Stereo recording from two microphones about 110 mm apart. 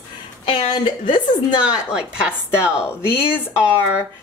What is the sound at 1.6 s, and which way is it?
Speech, 10° right (ahead or behind).